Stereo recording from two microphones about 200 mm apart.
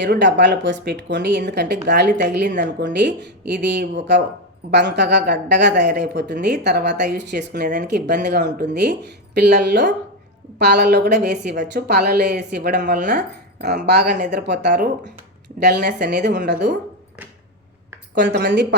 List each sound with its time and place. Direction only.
0.0 s speech: 60° right (ahead or behind)
18.2 s speech: 60° right (ahead or behind)